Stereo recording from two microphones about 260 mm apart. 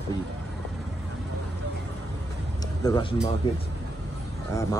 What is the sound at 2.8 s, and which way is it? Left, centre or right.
Speech, centre.